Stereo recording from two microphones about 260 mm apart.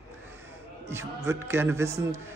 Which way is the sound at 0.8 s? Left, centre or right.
Centre.